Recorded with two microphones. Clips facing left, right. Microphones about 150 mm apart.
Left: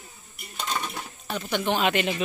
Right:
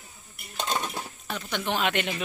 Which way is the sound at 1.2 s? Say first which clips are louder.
Left 5 dB; 5° left (ahead or behind).